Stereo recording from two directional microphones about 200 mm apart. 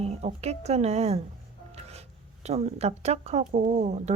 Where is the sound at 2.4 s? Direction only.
30° right (ahead or behind).